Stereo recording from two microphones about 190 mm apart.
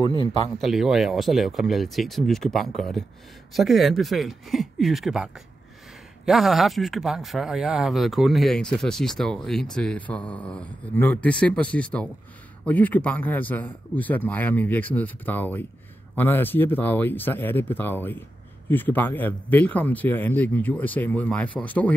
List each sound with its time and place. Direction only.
0.0 s speech: 25° left (ahead or behind)
0.6 s speech: centre (ahead or behind)